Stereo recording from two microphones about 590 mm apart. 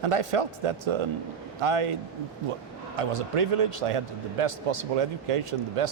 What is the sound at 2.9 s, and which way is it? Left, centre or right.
A man's voice, right.